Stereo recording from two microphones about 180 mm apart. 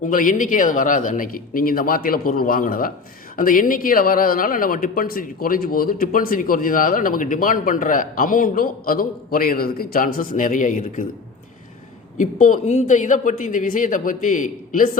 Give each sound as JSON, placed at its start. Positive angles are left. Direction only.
{"t": 0.0, "sound": "speech", "side_deg": 50}
{"t": 12.1, "sound": "speech", "side_deg": 45}